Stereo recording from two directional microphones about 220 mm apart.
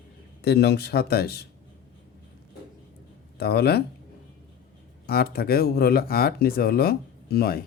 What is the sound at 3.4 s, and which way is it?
Speech, 45° left (ahead or behind).